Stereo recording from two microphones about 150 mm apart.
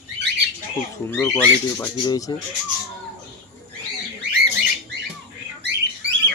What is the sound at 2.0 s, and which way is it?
Speech, 25° left (ahead or behind).